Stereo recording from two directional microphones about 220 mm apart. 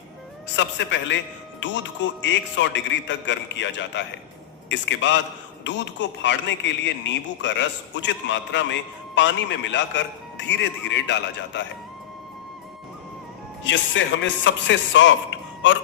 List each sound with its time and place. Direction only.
0.5 s a man's voice: 55° left (ahead or behind)
13.7 s a man's voice: 55° left (ahead or behind)